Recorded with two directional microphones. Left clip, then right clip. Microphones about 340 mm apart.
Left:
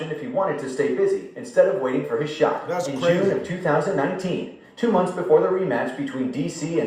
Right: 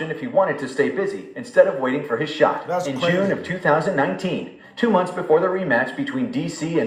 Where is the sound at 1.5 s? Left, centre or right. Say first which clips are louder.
Right 2 dB; right.